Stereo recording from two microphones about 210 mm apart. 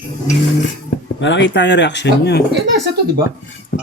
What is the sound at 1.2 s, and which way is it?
Speech, 60° left (ahead or behind).